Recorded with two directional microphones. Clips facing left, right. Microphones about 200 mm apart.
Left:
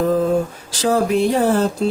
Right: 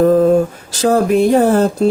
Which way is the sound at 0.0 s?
50° right (ahead or behind).